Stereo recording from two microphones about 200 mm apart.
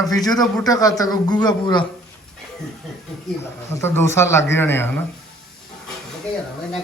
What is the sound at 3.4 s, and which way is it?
Speech, 10° left (ahead or behind).